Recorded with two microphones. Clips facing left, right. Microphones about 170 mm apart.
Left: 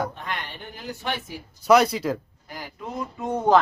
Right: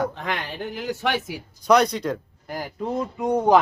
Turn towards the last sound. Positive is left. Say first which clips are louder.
# right 2 dB
turn(degrees=-15)  # may be behind; listen again after turning